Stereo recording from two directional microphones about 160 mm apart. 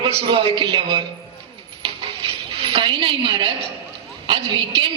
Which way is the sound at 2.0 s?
35° right (ahead or behind).